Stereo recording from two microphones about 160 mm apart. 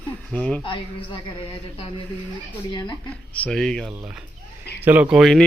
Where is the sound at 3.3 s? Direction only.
5° left (ahead or behind).